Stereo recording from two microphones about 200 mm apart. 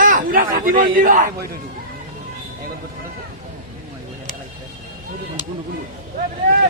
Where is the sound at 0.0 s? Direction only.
45° right (ahead or behind).